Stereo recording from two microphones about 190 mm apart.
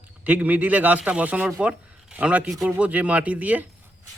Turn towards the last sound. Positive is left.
turn(degrees=-10)  # may be behind; listen again after turning